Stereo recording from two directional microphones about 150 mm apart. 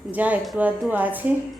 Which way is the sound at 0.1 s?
10° right (ahead or behind).